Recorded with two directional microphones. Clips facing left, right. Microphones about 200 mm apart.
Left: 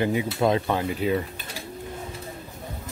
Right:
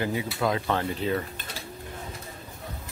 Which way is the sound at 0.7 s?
10° left (ahead or behind).